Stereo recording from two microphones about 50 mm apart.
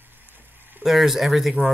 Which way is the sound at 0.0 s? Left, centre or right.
Right.